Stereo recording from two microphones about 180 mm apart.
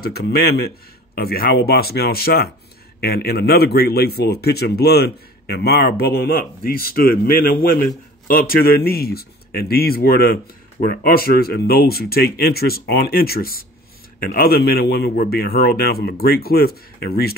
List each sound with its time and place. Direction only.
0.0 s speech: 60° left (ahead or behind)